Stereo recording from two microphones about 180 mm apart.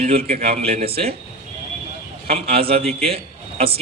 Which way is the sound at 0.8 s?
60° right (ahead or behind).